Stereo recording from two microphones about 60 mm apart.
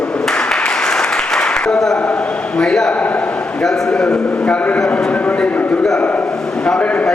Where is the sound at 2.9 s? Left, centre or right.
Left.